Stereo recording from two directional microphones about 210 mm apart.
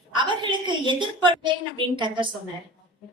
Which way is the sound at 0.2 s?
25° right (ahead or behind).